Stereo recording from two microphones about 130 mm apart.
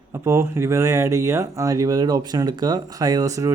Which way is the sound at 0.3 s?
20° right (ahead or behind).